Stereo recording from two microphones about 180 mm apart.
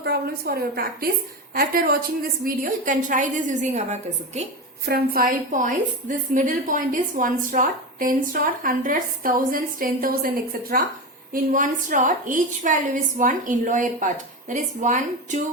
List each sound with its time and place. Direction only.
0.0 s a woman's voice: 60° right (ahead or behind); by 3.9 s 40° right (ahead or behind)
4.9 s a woman's voice: 55° right (ahead or behind)